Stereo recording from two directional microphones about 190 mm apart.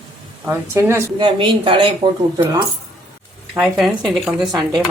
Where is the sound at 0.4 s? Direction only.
10° right (ahead or behind).